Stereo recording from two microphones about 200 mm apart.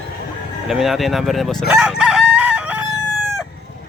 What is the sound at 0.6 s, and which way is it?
Speech, centre (ahead or behind).